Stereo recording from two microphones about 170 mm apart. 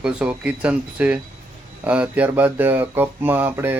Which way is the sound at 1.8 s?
10° right (ahead or behind).